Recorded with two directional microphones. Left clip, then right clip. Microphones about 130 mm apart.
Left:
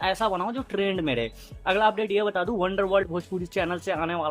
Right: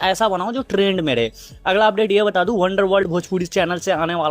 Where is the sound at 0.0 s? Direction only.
35° right (ahead or behind).